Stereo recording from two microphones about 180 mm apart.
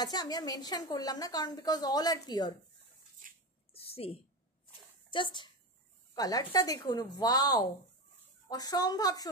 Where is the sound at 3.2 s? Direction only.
50° right (ahead or behind).